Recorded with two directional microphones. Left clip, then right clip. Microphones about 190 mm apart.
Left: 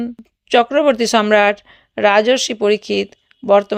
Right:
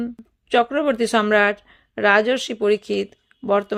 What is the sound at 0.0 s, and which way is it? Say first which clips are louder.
Speech: left 3 dB; 5° left (ahead or behind).